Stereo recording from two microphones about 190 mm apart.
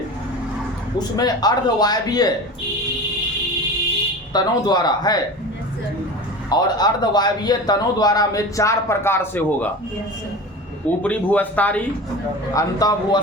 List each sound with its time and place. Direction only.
0.9 s a man's voice: 20° left (ahead or behind)
4.3 s a man's voice: 20° left (ahead or behind)
6.5 s a man's voice: 20° left (ahead or behind)
11.0 s speech: 10° left (ahead or behind)
12.5 s a man's voice: 20° left (ahead or behind)